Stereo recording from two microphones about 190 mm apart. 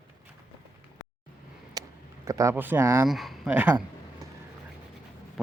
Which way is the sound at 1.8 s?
20° right (ahead or behind).